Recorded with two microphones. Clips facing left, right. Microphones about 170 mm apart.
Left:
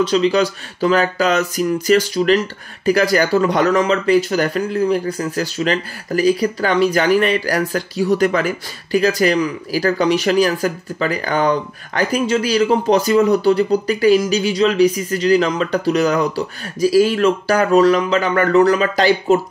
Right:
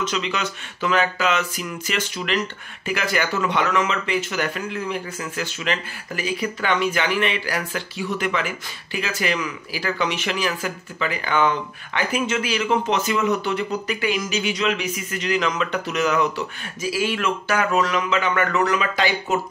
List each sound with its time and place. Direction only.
0.0 s speech: 35° left (ahead or behind)